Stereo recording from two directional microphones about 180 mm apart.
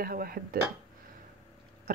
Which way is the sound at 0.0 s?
55° right (ahead or behind).